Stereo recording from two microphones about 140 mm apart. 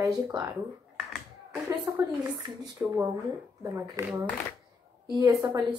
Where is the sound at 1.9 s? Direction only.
20° right (ahead or behind).